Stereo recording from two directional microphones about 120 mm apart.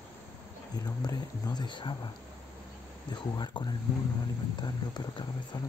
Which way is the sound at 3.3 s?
35° left (ahead or behind).